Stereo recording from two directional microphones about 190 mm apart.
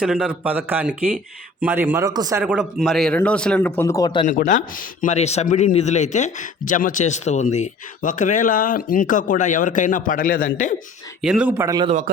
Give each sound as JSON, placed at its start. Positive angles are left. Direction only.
{"t": 0.0, "sound": "a man's voice", "side_deg": -5}
{"t": 2.4, "sound": "a man's voice", "side_deg": -5}
{"t": 4.3, "sound": "speech", "side_deg": 45}
{"t": 11.2, "sound": "speech", "side_deg": -5}